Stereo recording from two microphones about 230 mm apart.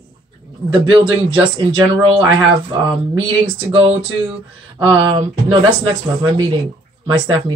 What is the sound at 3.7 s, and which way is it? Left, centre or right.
Speech, right.